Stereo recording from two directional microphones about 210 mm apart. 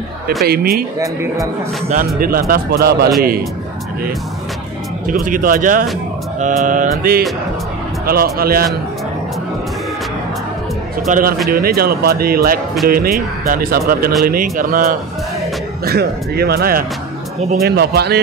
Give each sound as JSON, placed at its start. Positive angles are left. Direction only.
{"t": 0.5, "sound": "speech", "side_deg": -45}
{"t": 0.9, "sound": "a man's voice", "side_deg": -15}
{"t": 1.9, "sound": "speech", "side_deg": -40}
{"t": 5.2, "sound": "mantra", "side_deg": -40}
{"t": 8.1, "sound": "speech", "side_deg": -45}
{"t": 11.1, "sound": "mantra", "side_deg": -40}
{"t": 11.5, "sound": "speech", "side_deg": -45}